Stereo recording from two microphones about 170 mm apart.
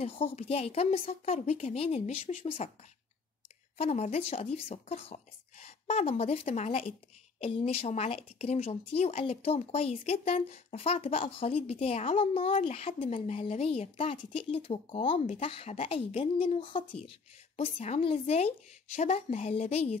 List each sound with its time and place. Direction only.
0.0 s speech: 35° left (ahead or behind)
3.7 s speech: 40° left (ahead or behind)